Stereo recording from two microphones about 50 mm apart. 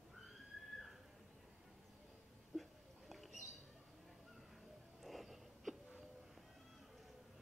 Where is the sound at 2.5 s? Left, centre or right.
Centre.